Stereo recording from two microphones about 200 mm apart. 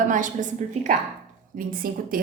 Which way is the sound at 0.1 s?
40° right (ahead or behind).